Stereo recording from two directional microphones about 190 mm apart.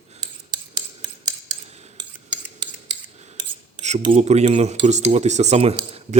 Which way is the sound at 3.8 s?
35° right (ahead or behind).